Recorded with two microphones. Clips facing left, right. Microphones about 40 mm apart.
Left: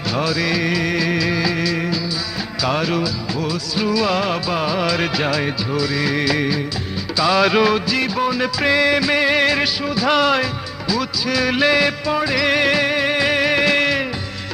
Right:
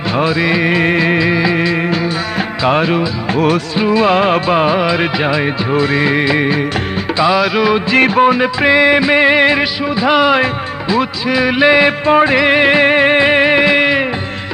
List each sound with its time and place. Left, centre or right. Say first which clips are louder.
0.2 s music: right 6 dB; right
3.3 s music: right 13 dB; right
3.8 s music: right 5 dB; right
4.8 s music: right 5 dB; right
5.7 s music: right 7 dB; right
7.3 s music of bollywood: right 2 dB; centre
7.9 s music: right 9 dB; right
8.6 s music: right 6 dB; right
10.4 s music: right 7 dB; right